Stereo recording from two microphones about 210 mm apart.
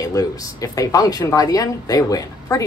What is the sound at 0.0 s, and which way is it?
Speech, 15° left (ahead or behind).